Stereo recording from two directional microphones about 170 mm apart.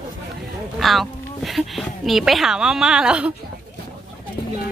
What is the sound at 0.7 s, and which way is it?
Speech, centre (ahead or behind).